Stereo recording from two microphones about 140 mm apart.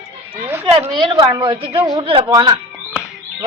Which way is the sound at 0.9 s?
25° right (ahead or behind).